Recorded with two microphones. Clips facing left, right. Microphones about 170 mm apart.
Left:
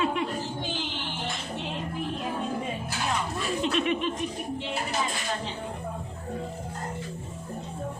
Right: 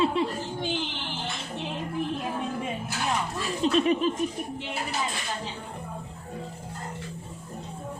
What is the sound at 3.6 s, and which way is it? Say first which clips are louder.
Laughter: right 5 dB; 35° right (ahead or behind).